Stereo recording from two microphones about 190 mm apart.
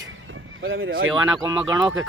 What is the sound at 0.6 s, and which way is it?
Speech, 90° right.